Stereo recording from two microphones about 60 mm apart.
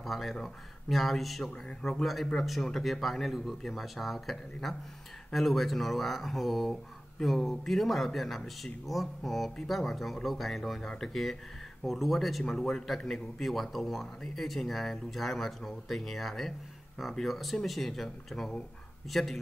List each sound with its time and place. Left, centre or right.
0.0 s speech: centre
1.5 s speech: centre
1.9 s speech: centre